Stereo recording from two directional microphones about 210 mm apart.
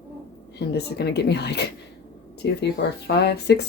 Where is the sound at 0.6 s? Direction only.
50° left (ahead or behind).